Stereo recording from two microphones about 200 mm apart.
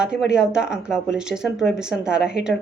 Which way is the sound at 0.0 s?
5° right (ahead or behind).